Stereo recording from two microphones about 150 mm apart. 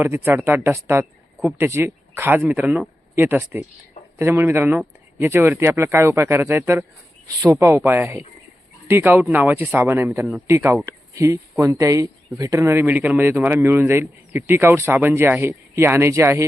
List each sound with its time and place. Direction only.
0.0 s speech: 15° right (ahead or behind)